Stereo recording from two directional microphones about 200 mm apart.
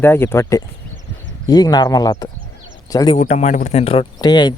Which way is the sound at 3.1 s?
35° left (ahead or behind).